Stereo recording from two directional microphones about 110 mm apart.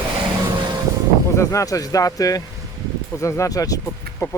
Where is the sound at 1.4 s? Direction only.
30° left (ahead or behind).